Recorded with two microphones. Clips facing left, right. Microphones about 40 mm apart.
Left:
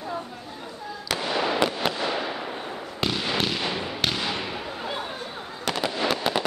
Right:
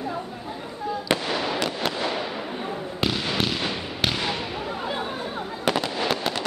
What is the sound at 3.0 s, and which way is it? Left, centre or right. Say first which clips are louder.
Fireworks: even; centre.